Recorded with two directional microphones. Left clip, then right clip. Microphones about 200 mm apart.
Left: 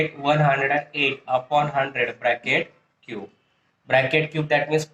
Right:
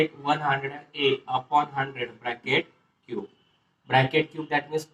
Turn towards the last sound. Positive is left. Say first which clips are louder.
# left 4 dB
turn(degrees=35)  # may be behind; listen again after turning